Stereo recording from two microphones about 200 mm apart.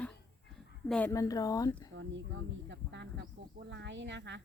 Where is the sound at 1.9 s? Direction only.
70° right (ahead or behind).